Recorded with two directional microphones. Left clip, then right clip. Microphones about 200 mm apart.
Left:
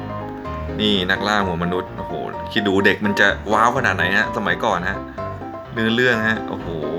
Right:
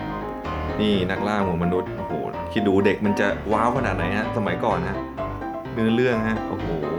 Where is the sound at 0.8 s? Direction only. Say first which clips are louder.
Left 5 dB; centre (ahead or behind).